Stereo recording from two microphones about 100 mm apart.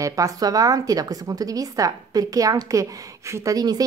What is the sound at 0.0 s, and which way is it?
A woman's voice, 35° right (ahead or behind).